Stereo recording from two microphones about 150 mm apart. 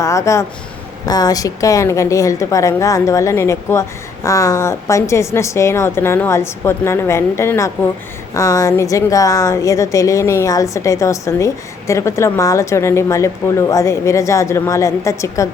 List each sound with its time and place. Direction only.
0.0 s a woman's voice: 20° left (ahead or behind)